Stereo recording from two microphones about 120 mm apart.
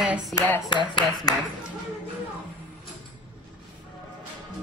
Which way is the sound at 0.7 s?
40° left (ahead or behind).